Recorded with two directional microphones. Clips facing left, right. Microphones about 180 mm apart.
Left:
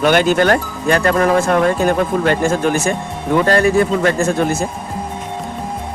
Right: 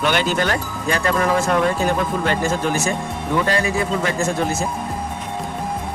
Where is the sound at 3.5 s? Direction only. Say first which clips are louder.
Left 7 dB; 55° left (ahead or behind).